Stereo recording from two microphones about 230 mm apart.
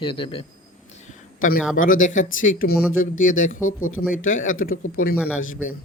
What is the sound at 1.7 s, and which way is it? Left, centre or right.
Speech, left.